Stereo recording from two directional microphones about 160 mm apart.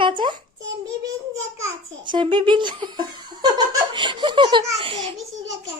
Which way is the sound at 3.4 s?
25° right (ahead or behind).